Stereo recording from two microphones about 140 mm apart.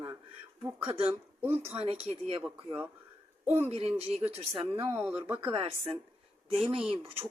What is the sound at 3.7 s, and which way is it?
Speech, 45° right (ahead or behind).